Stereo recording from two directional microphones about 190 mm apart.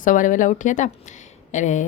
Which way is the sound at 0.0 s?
45° left (ahead or behind).